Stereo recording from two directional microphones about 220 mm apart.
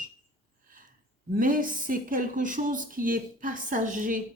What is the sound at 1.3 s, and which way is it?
Speech, 40° right (ahead or behind).